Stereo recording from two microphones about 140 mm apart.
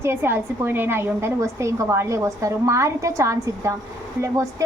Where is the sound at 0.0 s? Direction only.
15° right (ahead or behind).